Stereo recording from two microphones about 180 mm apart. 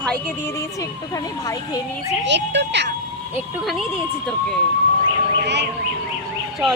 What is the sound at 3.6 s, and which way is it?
Speech, centre (ahead or behind).